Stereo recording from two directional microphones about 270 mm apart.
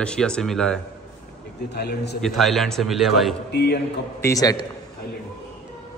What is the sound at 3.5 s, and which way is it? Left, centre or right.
Speech, left.